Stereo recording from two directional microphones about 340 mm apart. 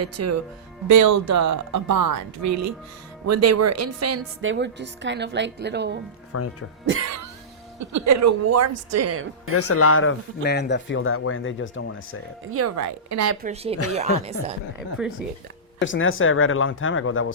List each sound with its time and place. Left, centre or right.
0.0 s a woman's voice: right
6.3 s speech: left
6.8 s a woman's voice: right
7.8 s speech: right
9.6 s speech: left
12.5 s speech: right
13.4 s speech: centre
14.8 s speech: centre
15.8 s speech: left